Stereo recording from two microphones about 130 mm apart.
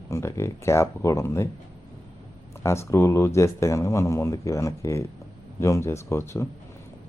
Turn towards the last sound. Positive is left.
turn(degrees=20)  # may be behind; listen again after turning